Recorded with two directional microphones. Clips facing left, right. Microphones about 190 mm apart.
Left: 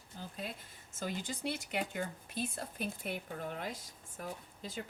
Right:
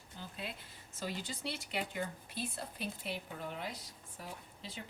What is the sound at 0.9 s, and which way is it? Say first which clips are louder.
Speech: left 2 dB; 50° left (ahead or behind).